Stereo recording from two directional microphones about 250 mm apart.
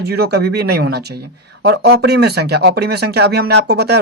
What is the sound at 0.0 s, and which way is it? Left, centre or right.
Speech, right.